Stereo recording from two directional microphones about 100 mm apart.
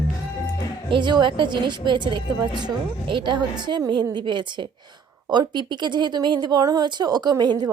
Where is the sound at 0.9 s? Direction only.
50° right (ahead or behind).